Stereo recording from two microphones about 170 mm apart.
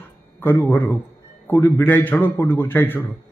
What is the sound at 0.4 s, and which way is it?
A man's voice, 15° left (ahead or behind).